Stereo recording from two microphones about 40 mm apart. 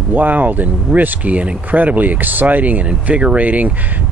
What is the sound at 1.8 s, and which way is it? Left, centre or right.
Speech, right.